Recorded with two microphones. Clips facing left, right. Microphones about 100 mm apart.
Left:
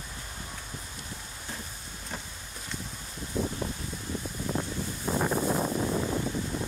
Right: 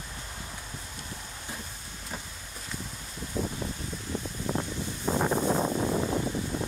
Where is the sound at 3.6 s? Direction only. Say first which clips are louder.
Left 1 dB; 15° left (ahead or behind).